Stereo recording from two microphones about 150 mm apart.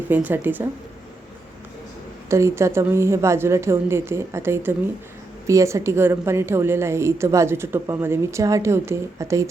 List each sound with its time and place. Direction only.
0.1 s a woman's voice: 10° right (ahead or behind)
2.3 s a woman's voice: 20° right (ahead or behind)